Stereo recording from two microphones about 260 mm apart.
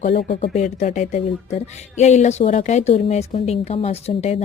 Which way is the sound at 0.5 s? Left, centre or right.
Left.